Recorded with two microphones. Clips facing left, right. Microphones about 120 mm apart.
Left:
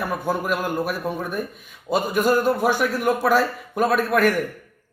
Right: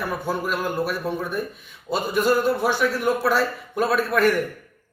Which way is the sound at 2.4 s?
50° left (ahead or behind).